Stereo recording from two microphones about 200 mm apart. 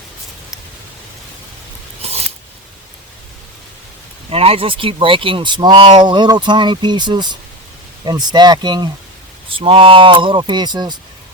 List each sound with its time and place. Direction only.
2.0 s scissors: 30° right (ahead or behind)
4.3 s speech: 30° right (ahead or behind)